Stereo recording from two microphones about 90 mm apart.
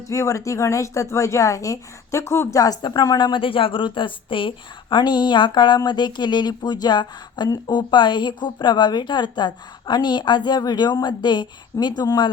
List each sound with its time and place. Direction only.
0.1 s speech: 35° left (ahead or behind)
2.8 s a woman's voice: 50° left (ahead or behind)
3.4 s a woman's voice: 75° left (ahead or behind); by 12.3 s 50° left (ahead or behind)